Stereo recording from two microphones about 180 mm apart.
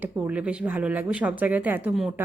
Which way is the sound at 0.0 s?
10° right (ahead or behind).